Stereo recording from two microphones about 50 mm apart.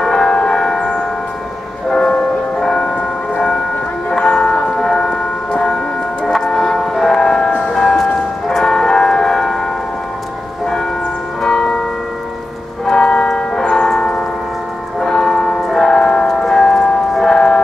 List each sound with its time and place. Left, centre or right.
0.0 s church bell: centre
1.9 s music: centre
4.2 s music: centre
4.7 s a sound: centre
5.5 s church bell: centre
6.2 s music: centre
11.4 s church bell: centre
12.8 s music: centre
13.7 s church bell: centre
15.0 s a sound: centre
17.1 s music: centre